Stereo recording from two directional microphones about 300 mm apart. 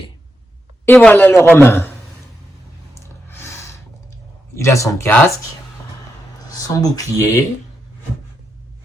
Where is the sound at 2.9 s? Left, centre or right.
Centre.